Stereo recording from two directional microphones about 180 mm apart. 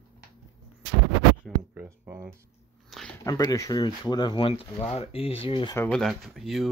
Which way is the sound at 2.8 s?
Centre (ahead or behind).